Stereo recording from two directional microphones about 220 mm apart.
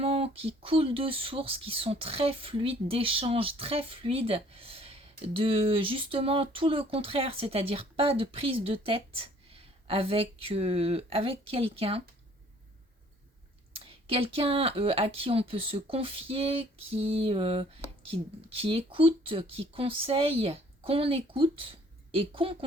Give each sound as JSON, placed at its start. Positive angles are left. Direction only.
{"t": 0.0, "sound": "speech", "side_deg": -25}
{"t": 13.7, "sound": "speech", "side_deg": -25}